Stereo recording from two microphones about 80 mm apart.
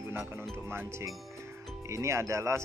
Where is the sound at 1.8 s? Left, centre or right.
Right.